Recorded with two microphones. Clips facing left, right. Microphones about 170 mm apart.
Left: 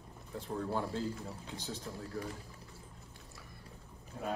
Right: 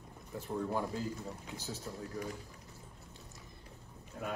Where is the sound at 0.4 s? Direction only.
10° right (ahead or behind).